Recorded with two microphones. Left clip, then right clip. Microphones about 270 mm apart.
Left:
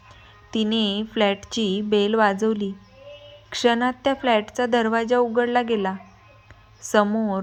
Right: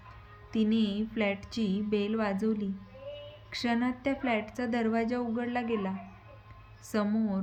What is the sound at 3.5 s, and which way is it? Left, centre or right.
A woman's voice, left.